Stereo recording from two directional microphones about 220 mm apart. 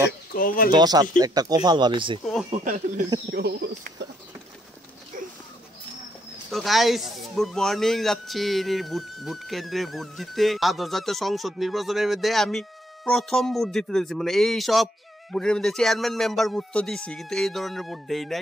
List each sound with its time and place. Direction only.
0.3 s speech: 40° left (ahead or behind)
0.7 s speech: 20° right (ahead or behind)
2.5 s speech: 35° right (ahead or behind)
3.3 s speech: 45° right (ahead or behind)
6.5 s speech: centre (ahead or behind)